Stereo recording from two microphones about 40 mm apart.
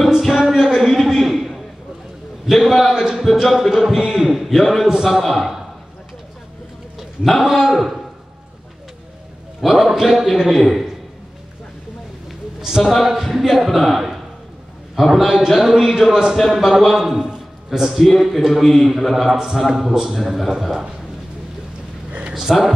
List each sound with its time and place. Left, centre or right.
0.2 s a sound: centre
3.3 s a man's voice: centre
4.5 s a man's voice: centre
7.0 s a man's voice: centre
9.6 s a man's voice: centre
12.3 s a sound: centre
13.0 s a man's voice: centre
15.2 s a man's voice: centre
16.5 s a man's voice: centre
22.3 s speech: centre